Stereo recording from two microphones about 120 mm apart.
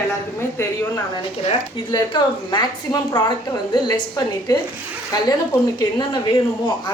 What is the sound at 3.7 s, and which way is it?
Speech, 35° left (ahead or behind).